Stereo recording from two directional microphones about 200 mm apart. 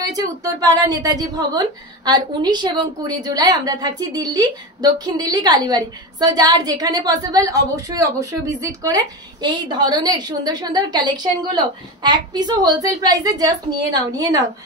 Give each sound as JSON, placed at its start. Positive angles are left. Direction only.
{"t": 0.0, "sound": "a woman's voice", "side_deg": -20}